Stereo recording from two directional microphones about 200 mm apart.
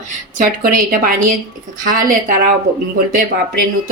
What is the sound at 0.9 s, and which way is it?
Speech, 45° right (ahead or behind).